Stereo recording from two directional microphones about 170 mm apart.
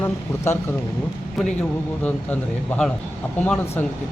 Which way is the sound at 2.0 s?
10° left (ahead or behind).